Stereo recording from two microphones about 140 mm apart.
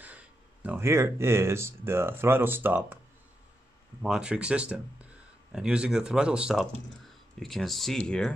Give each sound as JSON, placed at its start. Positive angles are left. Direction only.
{"t": 0.0, "sound": "speech", "side_deg": -10}
{"t": 4.0, "sound": "speech", "side_deg": -5}